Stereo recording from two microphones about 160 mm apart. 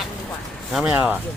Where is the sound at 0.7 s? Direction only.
5° right (ahead or behind).